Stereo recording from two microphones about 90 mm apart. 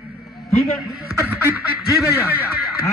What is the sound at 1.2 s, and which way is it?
Quack, 20° right (ahead or behind).